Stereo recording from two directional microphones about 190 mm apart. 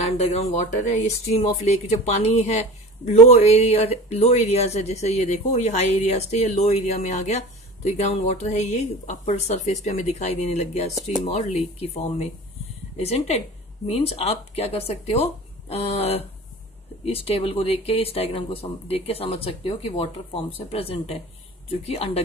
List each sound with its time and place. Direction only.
0.2 s speech: 35° left (ahead or behind)